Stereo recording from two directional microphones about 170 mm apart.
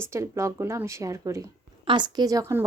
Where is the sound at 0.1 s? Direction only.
15° right (ahead or behind).